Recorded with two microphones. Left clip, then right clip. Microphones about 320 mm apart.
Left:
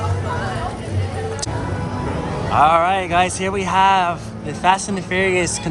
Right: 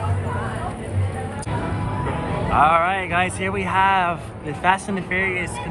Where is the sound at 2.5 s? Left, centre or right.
Centre.